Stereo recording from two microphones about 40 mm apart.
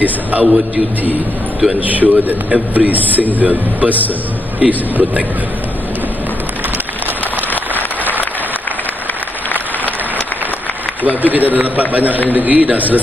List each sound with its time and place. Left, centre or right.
0.0 s a man's voice: right
1.8 s a man's voice: right
11.2 s a man's voice: right